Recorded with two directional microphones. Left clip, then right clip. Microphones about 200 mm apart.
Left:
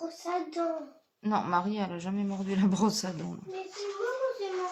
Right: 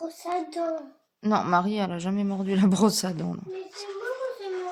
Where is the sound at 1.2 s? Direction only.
45° right (ahead or behind).